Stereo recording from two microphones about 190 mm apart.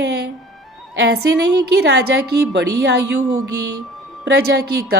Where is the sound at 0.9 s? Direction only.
65° right (ahead or behind).